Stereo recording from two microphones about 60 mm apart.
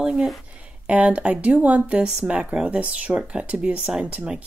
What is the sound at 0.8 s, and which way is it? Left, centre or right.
Speech, right.